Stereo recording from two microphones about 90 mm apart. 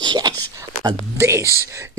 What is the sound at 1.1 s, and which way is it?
Speech, 30° right (ahead or behind).